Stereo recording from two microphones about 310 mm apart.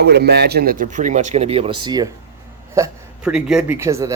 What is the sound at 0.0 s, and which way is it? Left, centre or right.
Speech, right.